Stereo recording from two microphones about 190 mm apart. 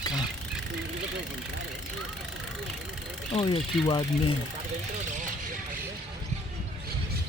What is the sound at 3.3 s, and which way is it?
Speech, 25° left (ahead or behind).